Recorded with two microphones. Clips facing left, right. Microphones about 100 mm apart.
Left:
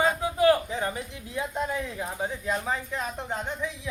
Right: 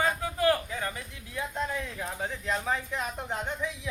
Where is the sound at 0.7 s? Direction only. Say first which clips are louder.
Left 5 dB; 25° left (ahead or behind).